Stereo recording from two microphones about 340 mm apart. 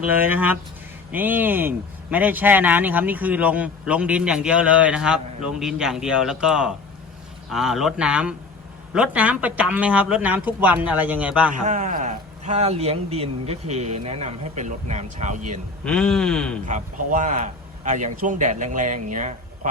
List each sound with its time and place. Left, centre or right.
0.0 s speech: centre
11.5 s a man's voice: right
15.8 s speech: centre
16.6 s a man's voice: right